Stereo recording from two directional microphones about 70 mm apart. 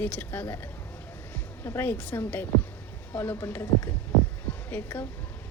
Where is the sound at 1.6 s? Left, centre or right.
Left.